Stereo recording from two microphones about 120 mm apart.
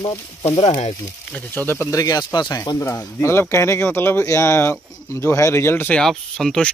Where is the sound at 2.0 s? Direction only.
35° left (ahead or behind).